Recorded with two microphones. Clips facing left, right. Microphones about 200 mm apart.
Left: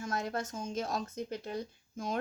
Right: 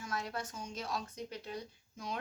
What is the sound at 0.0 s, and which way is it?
Speech, 45° left (ahead or behind).